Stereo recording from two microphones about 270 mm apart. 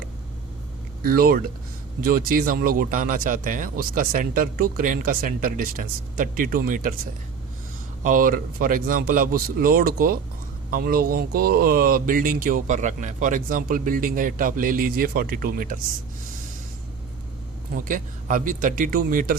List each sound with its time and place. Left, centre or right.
1.0 s speech: right
8.0 s speech: right
17.8 s speech: right